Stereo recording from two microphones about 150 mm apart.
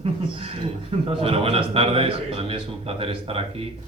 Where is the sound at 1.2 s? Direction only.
40° right (ahead or behind).